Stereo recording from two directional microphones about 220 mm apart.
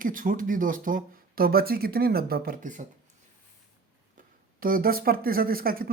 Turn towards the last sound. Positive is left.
turn(degrees=-40)  # may be behind; listen again after turning